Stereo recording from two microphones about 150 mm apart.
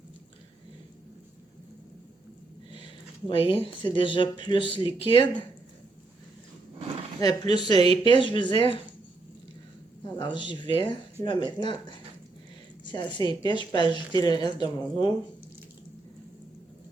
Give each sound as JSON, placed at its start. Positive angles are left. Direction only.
{"t": 3.2, "sound": "speech", "side_deg": 40}
{"t": 7.2, "sound": "speech", "side_deg": 30}
{"t": 10.0, "sound": "speech", "side_deg": 30}